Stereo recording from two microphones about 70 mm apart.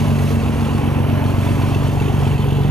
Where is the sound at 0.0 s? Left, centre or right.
Centre.